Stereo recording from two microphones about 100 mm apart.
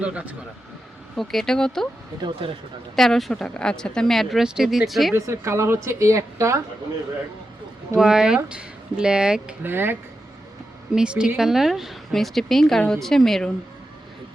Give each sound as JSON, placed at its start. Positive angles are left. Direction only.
{"t": 0.0, "sound": "speech", "side_deg": -15}
{"t": 1.1, "sound": "speech", "side_deg": 0}
{"t": 2.4, "sound": "speech", "side_deg": -60}
{"t": 2.9, "sound": "speech", "side_deg": 0}
{"t": 5.1, "sound": "a woman's voice", "side_deg": -30}
{"t": 7.9, "sound": "speech", "side_deg": -5}
{"t": 9.6, "sound": "a woman's voice", "side_deg": -20}
{"t": 10.9, "sound": "speech", "side_deg": -10}